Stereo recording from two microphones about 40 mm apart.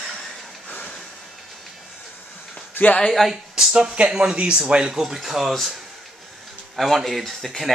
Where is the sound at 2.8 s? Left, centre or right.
Left.